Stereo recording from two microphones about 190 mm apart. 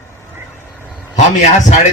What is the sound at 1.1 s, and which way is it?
Speech, 35° left (ahead or behind).